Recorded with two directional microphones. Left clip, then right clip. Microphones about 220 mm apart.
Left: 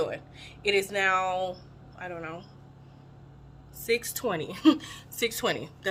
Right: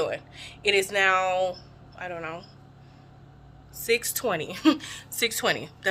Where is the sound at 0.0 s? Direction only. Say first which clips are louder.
Right 2 dB; 5° left (ahead or behind).